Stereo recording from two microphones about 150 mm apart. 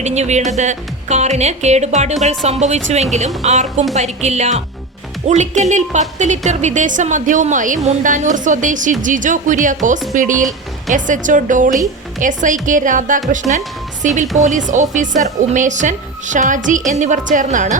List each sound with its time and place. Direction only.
0.0 s a woman's voice: 50° right (ahead or behind)